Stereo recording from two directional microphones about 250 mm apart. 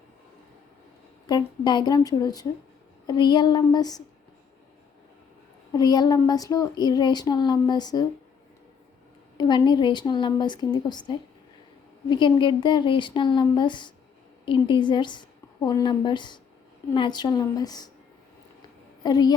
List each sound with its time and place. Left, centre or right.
1.3 s speech: centre
5.7 s speech: centre
9.4 s a woman's voice: centre
19.0 s speech: centre